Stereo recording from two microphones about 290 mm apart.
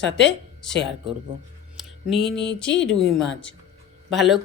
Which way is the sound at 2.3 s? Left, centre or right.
Left.